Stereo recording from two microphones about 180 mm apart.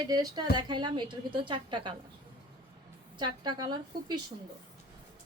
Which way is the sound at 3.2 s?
25° right (ahead or behind).